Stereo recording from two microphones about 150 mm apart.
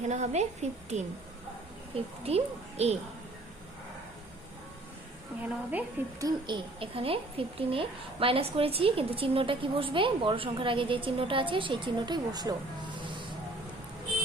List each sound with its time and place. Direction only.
0.0 s a woman's voice: 50° right (ahead or behind)
2.2 s a woman's voice: 45° right (ahead or behind)
5.4 s a woman's voice: 10° right (ahead or behind)
6.2 s speech: 35° right (ahead or behind)